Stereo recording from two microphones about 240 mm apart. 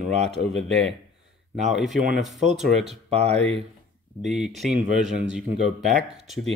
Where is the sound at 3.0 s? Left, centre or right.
Right.